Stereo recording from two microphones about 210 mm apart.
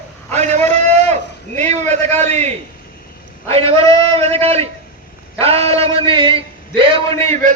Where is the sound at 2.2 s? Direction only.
30° right (ahead or behind).